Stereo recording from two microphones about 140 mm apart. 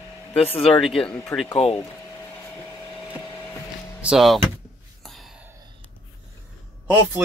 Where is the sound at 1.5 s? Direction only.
40° left (ahead or behind).